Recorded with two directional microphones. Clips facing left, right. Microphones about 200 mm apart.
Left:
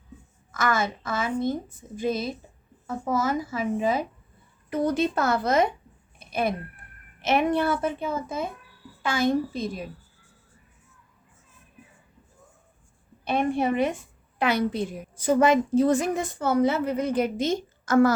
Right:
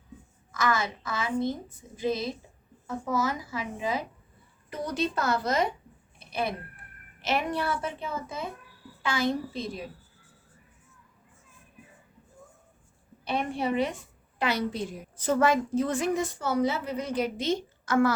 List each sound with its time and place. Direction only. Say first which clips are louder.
0.5 s a woman's voice: left 2 dB; 50° left (ahead or behind)
6.1 s a sound: left 4 dB; 50° left (ahead or behind)
7.3 s a woman's voice: left 6 dB; 50° left (ahead or behind)
13.2 s a woman's voice: left 5 dB; 50° left (ahead or behind)
15.1 s a woman's voice: left 4 dB; 10° left (ahead or behind)
15.8 s a woman's voice: left 7 dB; 40° left (ahead or behind)
16.1 s a woman's voice: left 3 dB; 55° left (ahead or behind)